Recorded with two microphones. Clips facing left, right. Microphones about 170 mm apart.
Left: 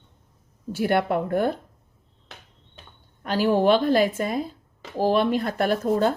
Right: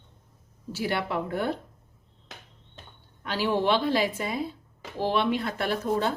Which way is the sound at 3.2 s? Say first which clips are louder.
Left 6 dB; 45° left (ahead or behind).